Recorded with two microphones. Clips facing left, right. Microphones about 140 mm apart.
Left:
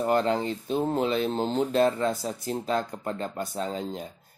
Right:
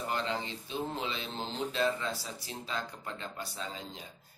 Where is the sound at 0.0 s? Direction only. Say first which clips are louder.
Left 10 dB; 45° left (ahead or behind).